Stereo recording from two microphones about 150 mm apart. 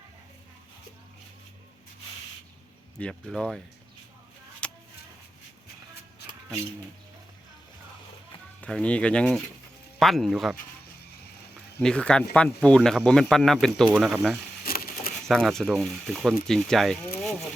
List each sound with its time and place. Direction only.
3.0 s speech: 5° left (ahead or behind)
4.6 s a sound: 5° left (ahead or behind)
8.6 s speech: 10° left (ahead or behind)
11.8 s speech: 5° left (ahead or behind)
14.6 s a sound: 75° left (ahead or behind)
15.3 s speech: centre (ahead or behind)